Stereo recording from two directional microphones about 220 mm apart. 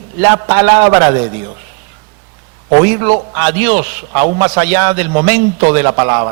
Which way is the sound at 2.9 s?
15° right (ahead or behind).